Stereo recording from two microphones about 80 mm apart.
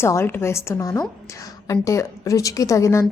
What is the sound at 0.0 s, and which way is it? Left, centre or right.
A woman's voice, left.